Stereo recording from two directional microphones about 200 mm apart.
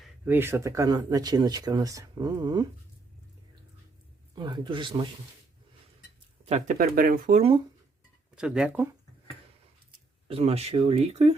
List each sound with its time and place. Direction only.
0.0 s speech: 10° right (ahead or behind)
4.4 s speech: 20° right (ahead or behind)
6.4 s speech: 35° right (ahead or behind)
8.4 s speech: 5° right (ahead or behind)
10.2 s speech: 30° right (ahead or behind)